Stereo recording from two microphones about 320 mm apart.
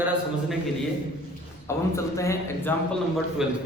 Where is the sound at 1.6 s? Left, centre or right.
Centre.